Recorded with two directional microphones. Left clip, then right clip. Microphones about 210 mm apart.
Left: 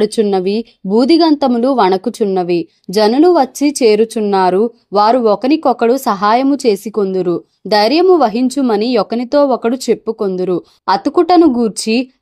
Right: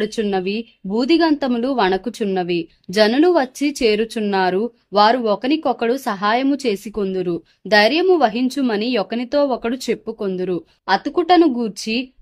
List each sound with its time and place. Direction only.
0.0 s a woman's voice: 15° left (ahead or behind)